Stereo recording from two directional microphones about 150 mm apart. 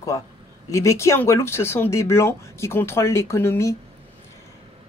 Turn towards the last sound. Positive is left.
turn(degrees=15)  # may be behind; listen again after turning